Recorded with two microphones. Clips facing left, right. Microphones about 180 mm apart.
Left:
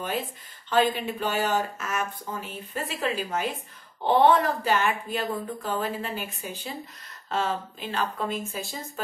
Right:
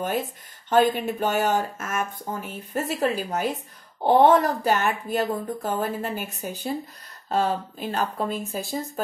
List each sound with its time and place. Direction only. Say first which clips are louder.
0.7 s speech: right 4 dB; 50° right (ahead or behind)
8.5 s speech: right 6 dB; centre (ahead or behind)